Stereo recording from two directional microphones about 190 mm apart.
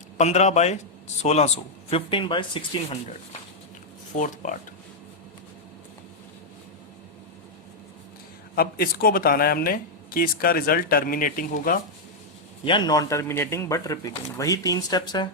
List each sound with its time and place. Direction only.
0.2 s speech: 35° left (ahead or behind)
4.1 s speech: 40° left (ahead or behind)
8.5 s speech: 50° left (ahead or behind)
12.6 s speech: 25° left (ahead or behind)